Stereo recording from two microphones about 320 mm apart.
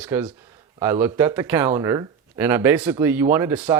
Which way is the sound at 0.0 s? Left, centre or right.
Centre.